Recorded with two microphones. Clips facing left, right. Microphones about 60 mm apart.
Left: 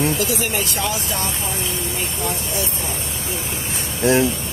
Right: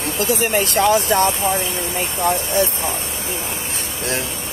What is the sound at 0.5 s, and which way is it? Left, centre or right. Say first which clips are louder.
Speech: right 8 dB; right.